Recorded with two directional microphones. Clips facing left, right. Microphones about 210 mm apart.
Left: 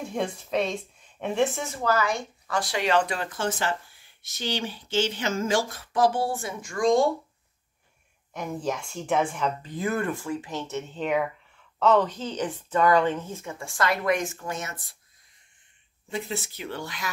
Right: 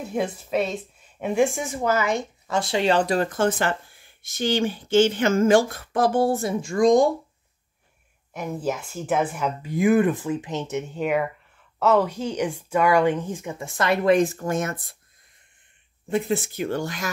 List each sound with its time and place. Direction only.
0.0 s a woman's voice: 5° right (ahead or behind); by 6.5 s 40° right (ahead or behind)
6.6 s speech: 20° right (ahead or behind)
8.3 s a woman's voice: 5° right (ahead or behind); by 15.0 s 55° right (ahead or behind)
16.1 s speech: 50° right (ahead or behind)